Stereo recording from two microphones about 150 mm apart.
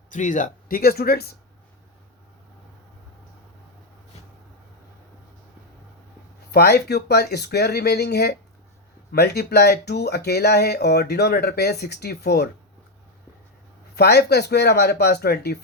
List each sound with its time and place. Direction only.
0.1 s speech: 60° left (ahead or behind); by 1.3 s 90° left
6.5 s speech: 90° left
13.9 s speech: 90° left